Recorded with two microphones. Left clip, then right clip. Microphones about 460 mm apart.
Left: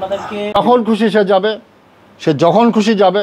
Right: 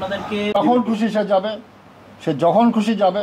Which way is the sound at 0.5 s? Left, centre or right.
Left.